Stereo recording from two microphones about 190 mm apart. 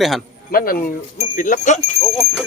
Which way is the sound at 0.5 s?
50° left (ahead or behind).